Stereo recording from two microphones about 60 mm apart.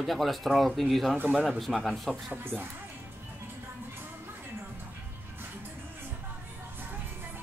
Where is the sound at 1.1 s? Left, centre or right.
Right.